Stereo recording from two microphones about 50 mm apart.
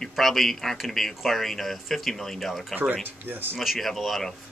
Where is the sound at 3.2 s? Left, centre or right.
Right.